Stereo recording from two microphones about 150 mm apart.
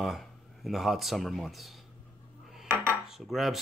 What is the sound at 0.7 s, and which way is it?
Speech, centre (ahead or behind).